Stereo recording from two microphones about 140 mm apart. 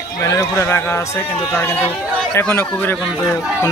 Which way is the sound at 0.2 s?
20° left (ahead or behind).